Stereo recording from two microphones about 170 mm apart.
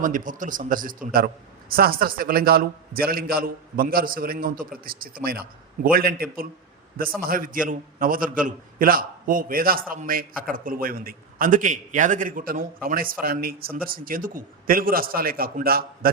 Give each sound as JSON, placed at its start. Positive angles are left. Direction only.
{"t": 0.0, "sound": "a man's voice", "side_deg": -50}